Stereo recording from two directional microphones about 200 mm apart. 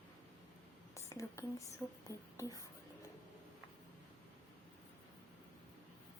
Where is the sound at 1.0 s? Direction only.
15° left (ahead or behind).